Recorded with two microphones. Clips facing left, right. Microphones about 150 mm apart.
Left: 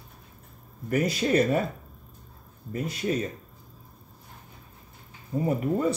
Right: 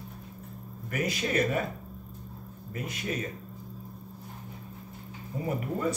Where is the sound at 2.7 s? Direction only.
35° left (ahead or behind).